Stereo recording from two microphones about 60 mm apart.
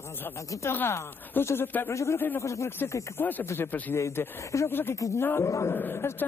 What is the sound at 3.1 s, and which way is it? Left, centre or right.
Speech, left.